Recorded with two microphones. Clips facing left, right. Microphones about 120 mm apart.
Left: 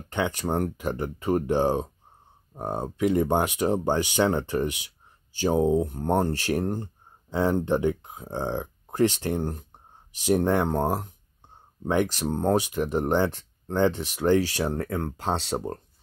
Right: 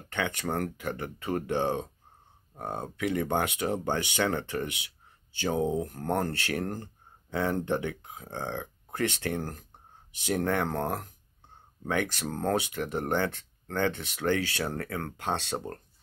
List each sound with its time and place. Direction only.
0.1 s speech: 15° left (ahead or behind)